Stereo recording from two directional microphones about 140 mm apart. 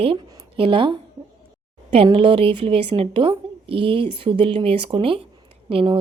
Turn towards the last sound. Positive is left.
turn(degrees=-40)  # may be behind; listen again after turning